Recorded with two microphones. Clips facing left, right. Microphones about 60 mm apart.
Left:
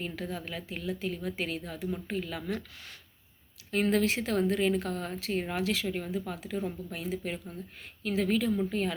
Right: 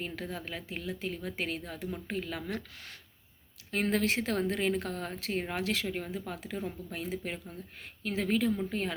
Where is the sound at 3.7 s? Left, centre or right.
Right.